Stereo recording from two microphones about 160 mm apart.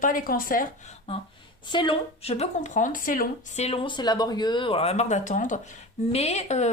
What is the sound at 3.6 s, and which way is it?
A woman's voice, 35° left (ahead or behind).